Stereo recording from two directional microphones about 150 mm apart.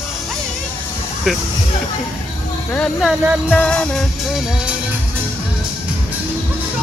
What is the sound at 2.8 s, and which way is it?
Music, centre (ahead or behind).